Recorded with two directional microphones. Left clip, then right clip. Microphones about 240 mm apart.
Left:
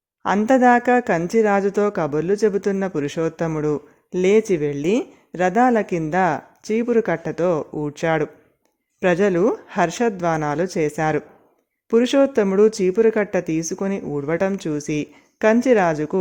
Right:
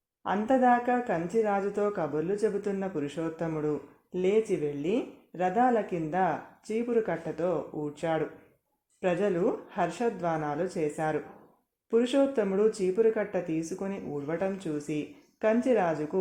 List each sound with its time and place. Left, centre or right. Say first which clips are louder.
0.2 s speech: left 9 dB; left